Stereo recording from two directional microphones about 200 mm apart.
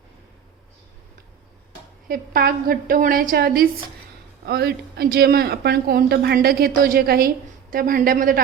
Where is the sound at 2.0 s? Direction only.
45° right (ahead or behind).